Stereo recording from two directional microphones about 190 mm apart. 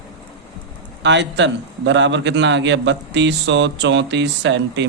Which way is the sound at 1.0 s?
70° right (ahead or behind).